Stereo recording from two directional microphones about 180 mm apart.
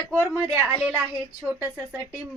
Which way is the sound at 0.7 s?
10° right (ahead or behind).